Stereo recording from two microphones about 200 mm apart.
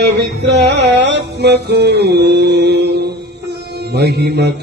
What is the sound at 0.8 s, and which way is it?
Music, 60° right (ahead or behind).